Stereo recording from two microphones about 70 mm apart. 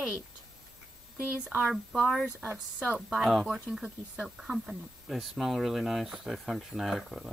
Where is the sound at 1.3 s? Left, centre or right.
Centre.